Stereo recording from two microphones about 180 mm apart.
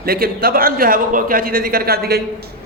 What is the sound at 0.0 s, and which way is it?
A man's voice, 55° right (ahead or behind).